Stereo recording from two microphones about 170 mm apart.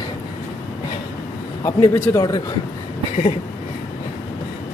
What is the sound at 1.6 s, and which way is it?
Speech, 20° left (ahead or behind).